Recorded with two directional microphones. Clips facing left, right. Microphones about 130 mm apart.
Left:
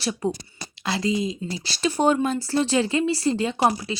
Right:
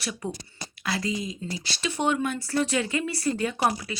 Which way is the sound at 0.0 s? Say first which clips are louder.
Left 7 dB; 35° left (ahead or behind).